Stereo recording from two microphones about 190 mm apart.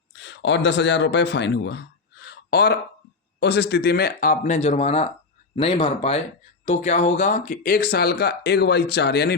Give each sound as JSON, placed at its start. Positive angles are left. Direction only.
{"t": 0.1, "sound": "speech", "side_deg": 70}